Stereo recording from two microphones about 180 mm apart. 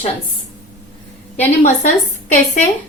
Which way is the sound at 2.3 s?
40° left (ahead or behind).